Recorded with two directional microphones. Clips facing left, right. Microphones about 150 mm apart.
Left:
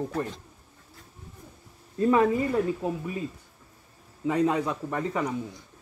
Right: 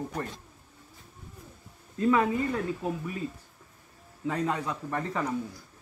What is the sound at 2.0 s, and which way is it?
Speech, 25° left (ahead or behind).